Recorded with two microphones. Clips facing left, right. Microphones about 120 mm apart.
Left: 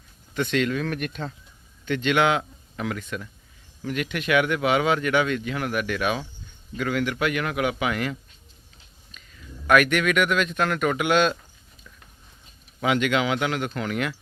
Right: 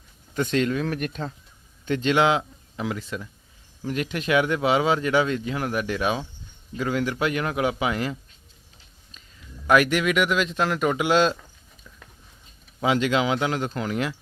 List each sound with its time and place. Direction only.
0.3 s a man's voice: 35° right (ahead or behind)
9.1 s a sound: 30° right (ahead or behind)
9.6 s speech: 25° right (ahead or behind)
12.8 s speech: 30° right (ahead or behind)